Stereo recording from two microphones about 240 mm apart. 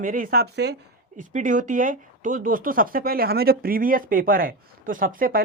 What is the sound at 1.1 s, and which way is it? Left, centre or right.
Speech, right.